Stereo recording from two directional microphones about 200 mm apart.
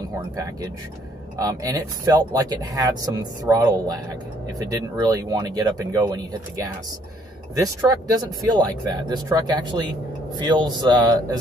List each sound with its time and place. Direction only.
1.4 s speech: 20° right (ahead or behind)
7.5 s speech: 20° right (ahead or behind)